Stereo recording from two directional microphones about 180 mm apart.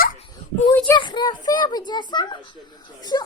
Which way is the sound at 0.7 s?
10° left (ahead or behind).